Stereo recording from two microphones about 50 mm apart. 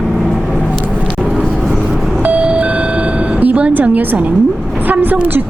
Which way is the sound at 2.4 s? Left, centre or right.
Right.